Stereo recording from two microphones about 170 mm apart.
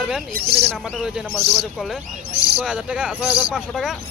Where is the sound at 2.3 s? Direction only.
35° right (ahead or behind).